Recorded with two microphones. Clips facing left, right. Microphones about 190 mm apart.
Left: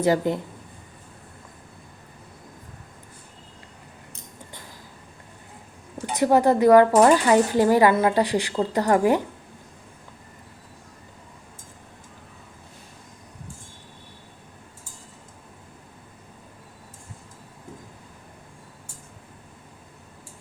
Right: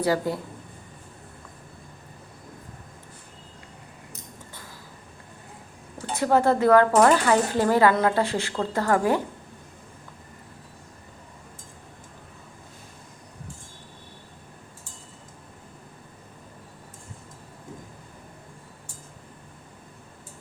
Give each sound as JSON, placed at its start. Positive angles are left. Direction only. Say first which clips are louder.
{"t": 0.0, "sound": "speech", "louder": "left 3 dB", "side_deg": 20}
{"t": 6.1, "sound": "speech", "louder": "left 2 dB", "side_deg": 15}